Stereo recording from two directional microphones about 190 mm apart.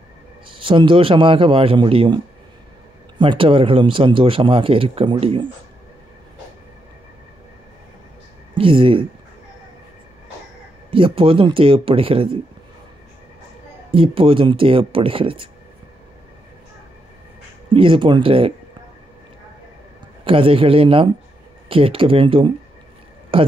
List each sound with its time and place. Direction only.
0.5 s speech: 25° right (ahead or behind)
8.5 s speech: 30° right (ahead or behind)
10.9 s speech: 30° right (ahead or behind)
13.9 s speech: 30° right (ahead or behind)
17.6 s speech: 25° right (ahead or behind)
20.2 s speech: 30° right (ahead or behind)